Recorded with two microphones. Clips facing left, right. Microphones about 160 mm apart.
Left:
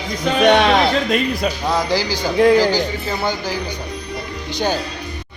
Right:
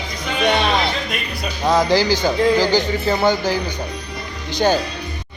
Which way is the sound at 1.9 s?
10° left (ahead or behind).